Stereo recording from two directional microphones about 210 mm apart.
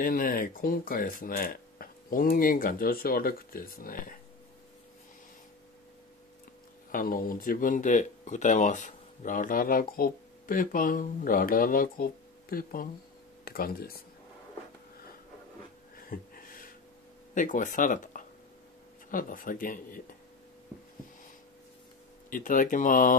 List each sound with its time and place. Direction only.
0.0 s speech: 40° left (ahead or behind)
6.9 s speech: 40° left (ahead or behind)
16.0 s gasp: 45° left (ahead or behind)
17.3 s speech: 40° left (ahead or behind)
22.3 s speech: 40° left (ahead or behind)